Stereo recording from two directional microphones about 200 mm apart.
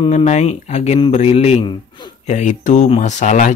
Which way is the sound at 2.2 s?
35° left (ahead or behind).